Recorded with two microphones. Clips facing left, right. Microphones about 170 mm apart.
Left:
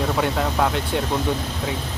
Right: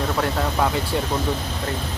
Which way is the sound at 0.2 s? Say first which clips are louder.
Even; centre (ahead or behind).